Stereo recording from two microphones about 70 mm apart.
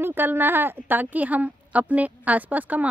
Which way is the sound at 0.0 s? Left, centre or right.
Right.